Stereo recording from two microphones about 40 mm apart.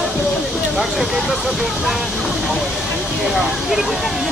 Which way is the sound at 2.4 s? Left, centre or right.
Centre.